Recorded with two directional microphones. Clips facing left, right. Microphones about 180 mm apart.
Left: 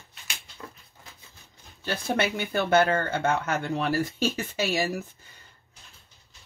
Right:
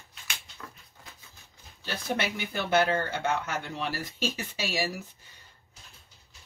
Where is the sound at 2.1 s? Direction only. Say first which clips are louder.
Left 6 dB; 50° left (ahead or behind).